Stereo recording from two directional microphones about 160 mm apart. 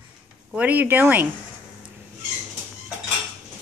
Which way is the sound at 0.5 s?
10° right (ahead or behind).